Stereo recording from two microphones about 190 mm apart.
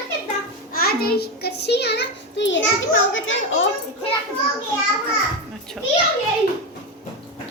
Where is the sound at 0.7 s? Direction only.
55° left (ahead or behind); by 3.6 s 90° left.